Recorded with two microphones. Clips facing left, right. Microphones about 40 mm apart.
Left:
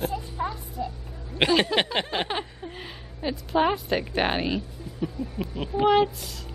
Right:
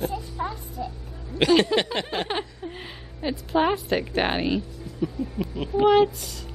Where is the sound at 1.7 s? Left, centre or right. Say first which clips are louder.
Right 1 dB; left.